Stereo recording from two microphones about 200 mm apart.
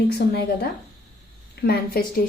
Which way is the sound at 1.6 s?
50° left (ahead or behind).